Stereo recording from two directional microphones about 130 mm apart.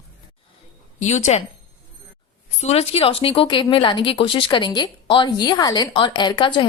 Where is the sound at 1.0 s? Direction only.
60° left (ahead or behind).